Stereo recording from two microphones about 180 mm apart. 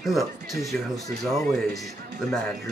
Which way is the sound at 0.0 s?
Centre (ahead or behind).